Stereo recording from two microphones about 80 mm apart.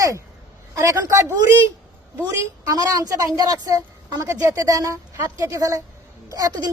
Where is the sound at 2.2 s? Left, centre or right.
Right.